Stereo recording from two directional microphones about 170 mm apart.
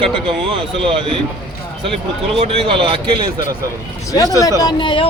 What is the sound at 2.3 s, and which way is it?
Speech, 35° right (ahead or behind).